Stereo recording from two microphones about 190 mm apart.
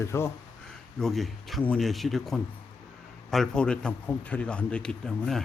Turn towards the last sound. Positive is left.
turn(degrees=0)  # may be behind; listen again after turning